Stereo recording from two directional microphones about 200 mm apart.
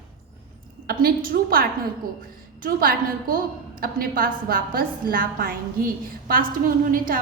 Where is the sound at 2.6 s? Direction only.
45° right (ahead or behind).